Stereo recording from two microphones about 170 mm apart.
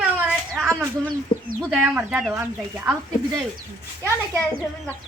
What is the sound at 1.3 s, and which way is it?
Speech, 30° left (ahead or behind).